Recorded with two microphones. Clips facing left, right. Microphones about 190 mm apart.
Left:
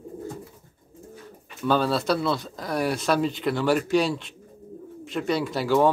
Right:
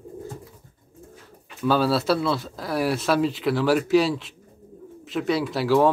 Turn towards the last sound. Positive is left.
turn(degrees=0)  # may be behind; listen again after turning